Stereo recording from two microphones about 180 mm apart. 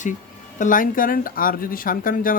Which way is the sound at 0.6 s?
50° left (ahead or behind).